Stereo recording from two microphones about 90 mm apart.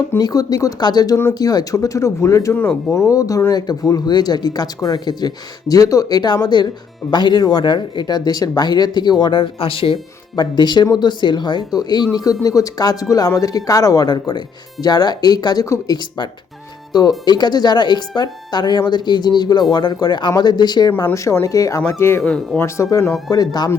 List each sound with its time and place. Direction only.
0.2 s speech: 45° left (ahead or behind); by 10.0 s 80° left
10.3 s speech: 50° left (ahead or behind)
16.9 s speech: 45° left (ahead or behind)
20.9 s speech: 35° left (ahead or behind)
21.8 s speech: 25° left (ahead or behind)
22.2 s speech: 5° left (ahead or behind)
22.5 s speech: 30° left (ahead or behind)
23.3 s speech: 45° left (ahead or behind)